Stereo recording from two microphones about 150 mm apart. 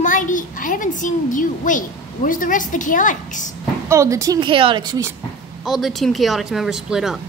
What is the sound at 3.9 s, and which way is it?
A woman's voice, 20° right (ahead or behind).